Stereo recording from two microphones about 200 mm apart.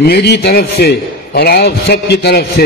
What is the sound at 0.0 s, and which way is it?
A man's voice, 55° left (ahead or behind).